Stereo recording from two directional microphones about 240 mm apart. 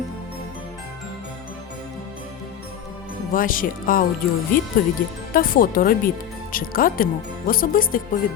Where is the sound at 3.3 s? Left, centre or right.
Left.